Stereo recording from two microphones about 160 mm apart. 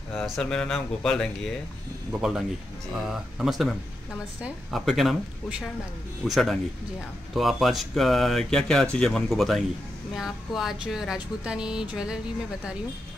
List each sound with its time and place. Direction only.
0.1 s speech: 5° left (ahead or behind)